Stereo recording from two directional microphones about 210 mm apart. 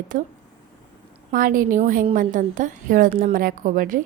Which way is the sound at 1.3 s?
40° right (ahead or behind).